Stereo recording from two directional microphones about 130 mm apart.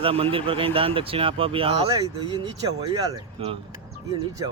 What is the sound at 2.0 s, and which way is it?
Speech, 35° right (ahead or behind).